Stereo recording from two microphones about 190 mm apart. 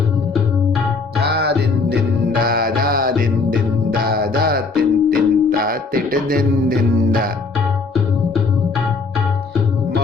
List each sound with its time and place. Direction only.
1.2 s music: 60° right (ahead or behind)